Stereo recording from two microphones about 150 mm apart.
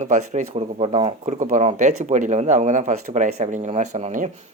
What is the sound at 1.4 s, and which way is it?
Speech, 55° right (ahead or behind).